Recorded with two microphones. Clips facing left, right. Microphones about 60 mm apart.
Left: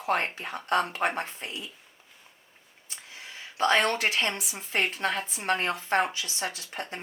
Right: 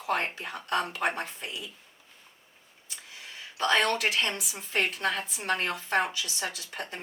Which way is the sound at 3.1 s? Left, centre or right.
Left.